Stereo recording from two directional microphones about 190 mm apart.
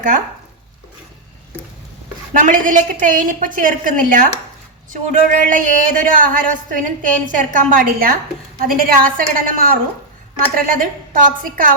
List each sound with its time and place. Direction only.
2.3 s speech: 45° right (ahead or behind)